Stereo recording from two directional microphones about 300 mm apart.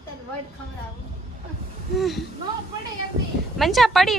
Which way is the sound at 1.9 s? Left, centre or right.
Centre.